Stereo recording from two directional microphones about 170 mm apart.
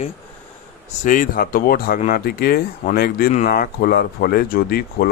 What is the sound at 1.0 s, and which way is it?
Speech, 50° left (ahead or behind).